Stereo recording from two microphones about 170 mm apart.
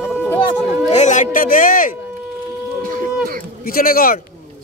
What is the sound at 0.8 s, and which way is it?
Speech, 45° left (ahead or behind).